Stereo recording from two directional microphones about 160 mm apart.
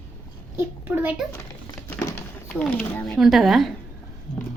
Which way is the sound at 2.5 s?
5° left (ahead or behind).